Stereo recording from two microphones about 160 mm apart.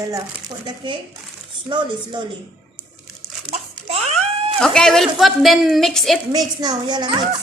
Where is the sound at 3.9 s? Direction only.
40° right (ahead or behind).